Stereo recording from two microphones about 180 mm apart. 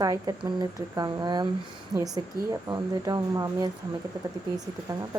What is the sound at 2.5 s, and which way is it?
A woman's voice, 20° right (ahead or behind).